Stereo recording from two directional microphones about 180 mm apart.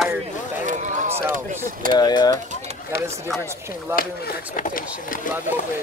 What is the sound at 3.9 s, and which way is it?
Speech, 15° right (ahead or behind).